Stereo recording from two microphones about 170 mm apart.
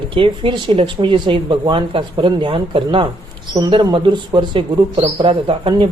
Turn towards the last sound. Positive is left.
turn(degrees=-30)  # may be behind; listen again after turning